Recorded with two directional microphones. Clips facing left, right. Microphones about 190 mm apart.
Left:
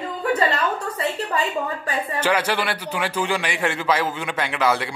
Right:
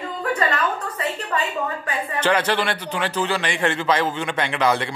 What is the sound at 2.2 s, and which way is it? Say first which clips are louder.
A man's voice: right 2 dB; 10° left (ahead or behind).